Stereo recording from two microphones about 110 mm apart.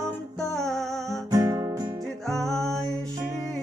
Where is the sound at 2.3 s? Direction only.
5° left (ahead or behind).